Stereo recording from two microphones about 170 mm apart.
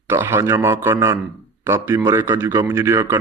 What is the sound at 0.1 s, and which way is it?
A man's voice, 15° right (ahead or behind).